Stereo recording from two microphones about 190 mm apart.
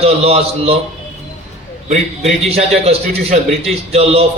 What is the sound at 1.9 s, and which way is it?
A man's voice, 35° right (ahead or behind).